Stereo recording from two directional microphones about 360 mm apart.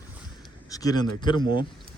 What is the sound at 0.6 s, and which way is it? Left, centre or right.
Speech, centre.